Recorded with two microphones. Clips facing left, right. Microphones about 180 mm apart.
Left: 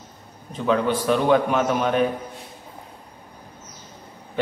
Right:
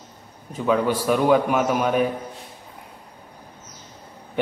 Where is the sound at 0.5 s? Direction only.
10° right (ahead or behind).